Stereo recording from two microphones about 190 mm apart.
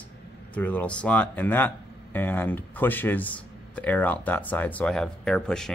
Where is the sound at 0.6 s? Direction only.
10° left (ahead or behind).